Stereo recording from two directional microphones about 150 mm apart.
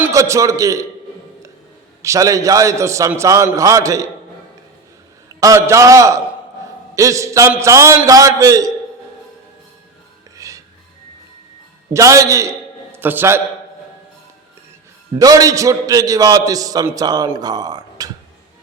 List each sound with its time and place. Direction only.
0.1 s a man's voice: 20° right (ahead or behind)
2.0 s a man's voice: 20° right (ahead or behind)
5.4 s a man's voice: 20° right (ahead or behind)
10.3 s music: 20° right (ahead or behind)
11.9 s a man's voice: 20° right (ahead or behind)
15.2 s a man's voice: 25° right (ahead or behind)